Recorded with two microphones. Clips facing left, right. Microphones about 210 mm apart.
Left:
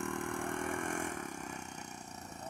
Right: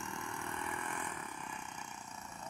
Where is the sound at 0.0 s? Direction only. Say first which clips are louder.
Left 7 dB; 55° left (ahead or behind).